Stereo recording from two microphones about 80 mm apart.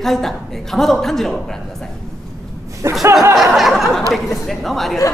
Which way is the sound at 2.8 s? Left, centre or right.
Right.